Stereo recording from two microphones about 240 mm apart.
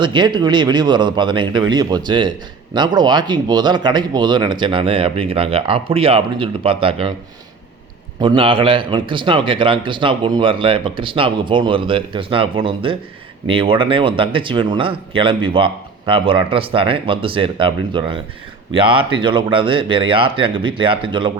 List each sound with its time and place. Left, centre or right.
0.0 s a man's voice: centre
8.2 s a man's voice: right